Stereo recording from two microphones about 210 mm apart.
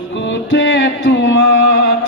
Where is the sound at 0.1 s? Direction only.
60° left (ahead or behind).